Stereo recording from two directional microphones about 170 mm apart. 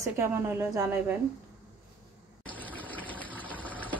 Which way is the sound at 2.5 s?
10° left (ahead or behind).